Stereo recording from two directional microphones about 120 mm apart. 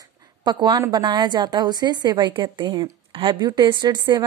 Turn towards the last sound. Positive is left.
turn(degrees=-40)  # may be behind; listen again after turning